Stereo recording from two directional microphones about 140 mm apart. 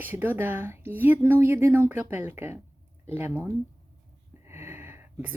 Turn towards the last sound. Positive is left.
turn(degrees=-15)  # may be behind; listen again after turning